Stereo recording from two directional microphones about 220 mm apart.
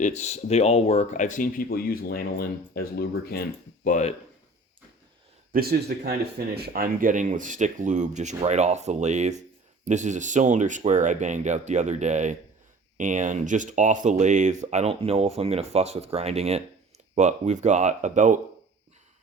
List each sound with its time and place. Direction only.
0.0 s speech: 30° left (ahead or behind)
5.5 s a man's voice: 45° right (ahead or behind)